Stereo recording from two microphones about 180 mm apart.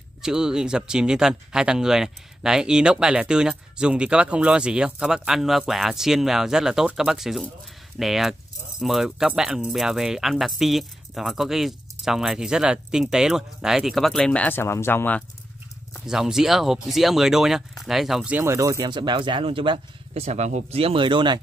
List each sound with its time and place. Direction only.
0.2 s speech: 5° right (ahead or behind)
16.1 s speech: 5° right (ahead or behind); by 21.4 s 25° right (ahead or behind)